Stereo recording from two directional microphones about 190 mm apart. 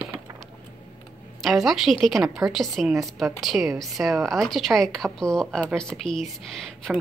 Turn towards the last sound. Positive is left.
turn(degrees=5)  # may be behind; listen again after turning